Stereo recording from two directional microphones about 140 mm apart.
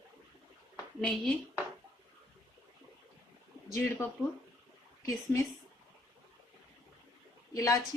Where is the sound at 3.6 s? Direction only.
20° left (ahead or behind).